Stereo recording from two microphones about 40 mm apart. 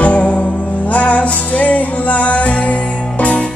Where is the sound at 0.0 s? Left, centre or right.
Left.